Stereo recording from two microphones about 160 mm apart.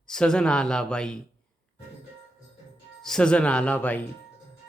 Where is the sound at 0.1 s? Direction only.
5° left (ahead or behind).